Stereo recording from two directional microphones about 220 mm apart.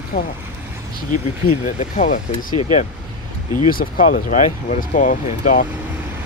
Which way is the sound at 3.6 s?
40° left (ahead or behind).